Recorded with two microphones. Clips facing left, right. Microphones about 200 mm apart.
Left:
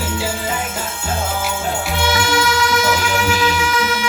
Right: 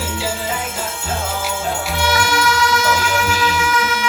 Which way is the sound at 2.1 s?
25° left (ahead or behind).